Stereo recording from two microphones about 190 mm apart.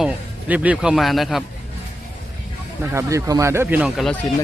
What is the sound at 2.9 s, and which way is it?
Speech, 15° right (ahead or behind).